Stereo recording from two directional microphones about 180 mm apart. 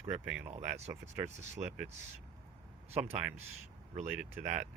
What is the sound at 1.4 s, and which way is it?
Speech, 40° right (ahead or behind).